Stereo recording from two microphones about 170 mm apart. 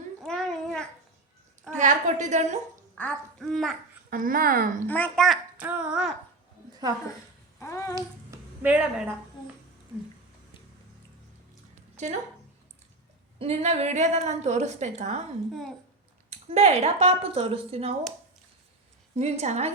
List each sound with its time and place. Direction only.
0.2 s babbling: 5° left (ahead or behind)
1.7 s a woman's voice: 45° right (ahead or behind)
3.0 s a child's voice: 5° left (ahead or behind)
4.1 s speech: 55° right (ahead or behind)
4.9 s a child's voice: 10° left (ahead or behind)
5.6 s a sound: 10° right (ahead or behind)
7.6 s a sound: 20° left (ahead or behind)
8.6 s a sound: 10° right (ahead or behind)
12.0 s a woman's voice: 40° right (ahead or behind)
13.4 s a woman's voice: 40° right (ahead or behind)
16.3 s a woman's voice: 40° right (ahead or behind)
19.1 s a woman's voice: 40° right (ahead or behind)